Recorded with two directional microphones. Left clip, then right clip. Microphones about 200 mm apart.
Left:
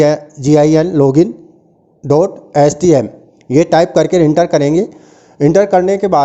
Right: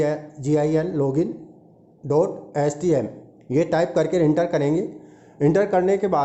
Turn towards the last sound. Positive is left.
turn(degrees=35)  # may be behind; listen again after turning